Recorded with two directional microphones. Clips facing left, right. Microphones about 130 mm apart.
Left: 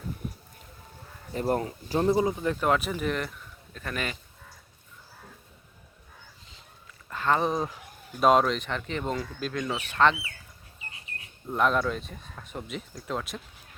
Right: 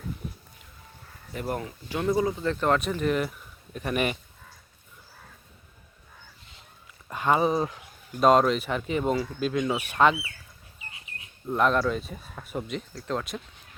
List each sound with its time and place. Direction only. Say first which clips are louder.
1.3 s speech: left 4 dB; 35° left (ahead or behind); by 3.3 s 5° right (ahead or behind)
3.8 s speech: right 6 dB; 15° right (ahead or behind)
7.1 s speech: right 2 dB; 15° right (ahead or behind)
11.4 s speech: right 2 dB; centre (ahead or behind)